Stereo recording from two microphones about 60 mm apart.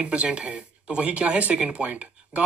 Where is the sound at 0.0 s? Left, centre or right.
Centre.